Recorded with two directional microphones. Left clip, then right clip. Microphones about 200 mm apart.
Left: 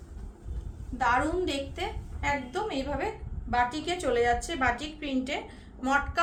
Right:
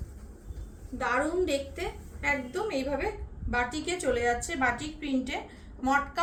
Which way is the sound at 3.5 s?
30° left (ahead or behind).